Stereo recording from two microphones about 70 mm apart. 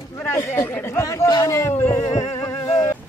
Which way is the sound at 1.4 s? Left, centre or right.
Left.